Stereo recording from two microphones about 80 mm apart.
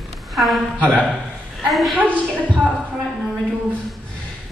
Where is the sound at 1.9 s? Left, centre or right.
Centre.